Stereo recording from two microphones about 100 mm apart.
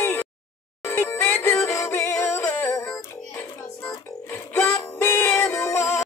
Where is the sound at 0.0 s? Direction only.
20° left (ahead or behind).